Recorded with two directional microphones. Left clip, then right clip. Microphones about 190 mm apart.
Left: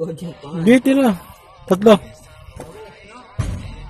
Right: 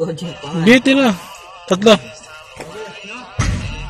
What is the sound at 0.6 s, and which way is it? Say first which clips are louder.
A man's voice: right 3 dB; 30° left (ahead or behind).